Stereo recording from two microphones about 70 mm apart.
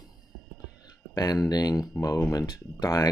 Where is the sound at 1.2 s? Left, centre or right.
Left.